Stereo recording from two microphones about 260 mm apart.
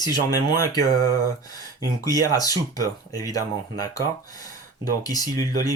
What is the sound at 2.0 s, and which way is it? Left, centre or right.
Speech, centre.